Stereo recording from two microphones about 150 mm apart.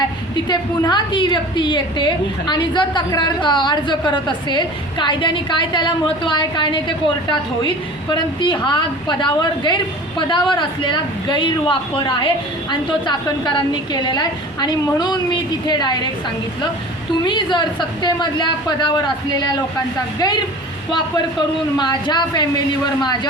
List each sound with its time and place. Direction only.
0.4 s a woman's voice: 30° left (ahead or behind)
8.1 s a woman's voice: 30° left (ahead or behind)
13.9 s a woman's voice: 30° left (ahead or behind)
17.2 s a woman's voice: 30° left (ahead or behind)
21.8 s a woman's voice: 30° left (ahead or behind)